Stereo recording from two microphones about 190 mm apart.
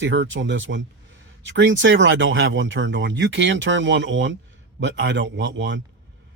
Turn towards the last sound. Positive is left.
turn(degrees=-70)  # may be behind; listen again after turning